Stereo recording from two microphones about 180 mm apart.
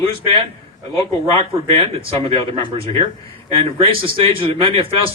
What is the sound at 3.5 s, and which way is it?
Speech, 35° right (ahead or behind).